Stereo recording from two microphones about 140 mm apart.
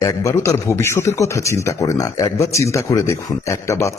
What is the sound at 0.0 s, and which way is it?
Speech, 20° left (ahead or behind).